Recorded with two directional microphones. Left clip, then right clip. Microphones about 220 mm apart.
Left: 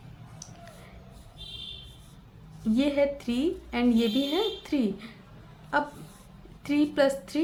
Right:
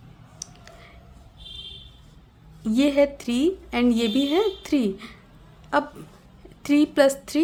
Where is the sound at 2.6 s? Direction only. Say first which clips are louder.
Right 5 dB; 45° right (ahead or behind).